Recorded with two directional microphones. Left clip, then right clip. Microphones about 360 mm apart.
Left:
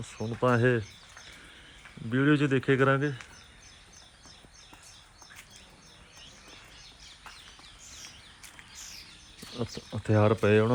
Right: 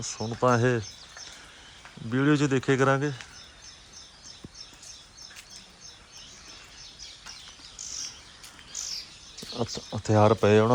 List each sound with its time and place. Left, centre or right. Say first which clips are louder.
0.0 s speech: right 3 dB; centre
2.0 s speech: right 1 dB; centre
9.6 s speech: right 4 dB; centre